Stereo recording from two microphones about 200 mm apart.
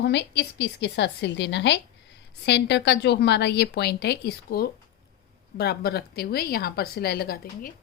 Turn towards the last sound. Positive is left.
turn(degrees=50)  # may be behind; listen again after turning